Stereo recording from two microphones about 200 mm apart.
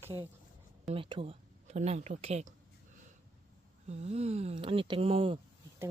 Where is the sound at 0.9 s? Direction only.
25° right (ahead or behind).